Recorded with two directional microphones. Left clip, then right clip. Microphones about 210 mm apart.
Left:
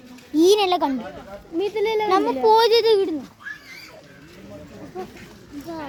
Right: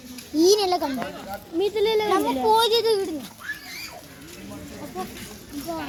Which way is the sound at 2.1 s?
50° left (ahead or behind).